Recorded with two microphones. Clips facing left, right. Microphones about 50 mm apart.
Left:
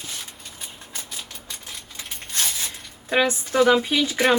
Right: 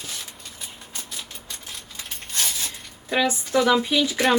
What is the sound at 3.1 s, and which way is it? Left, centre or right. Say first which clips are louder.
Speech: even; left.